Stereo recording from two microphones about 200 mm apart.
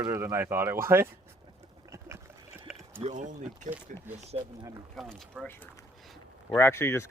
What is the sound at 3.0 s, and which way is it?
Speech, 35° right (ahead or behind).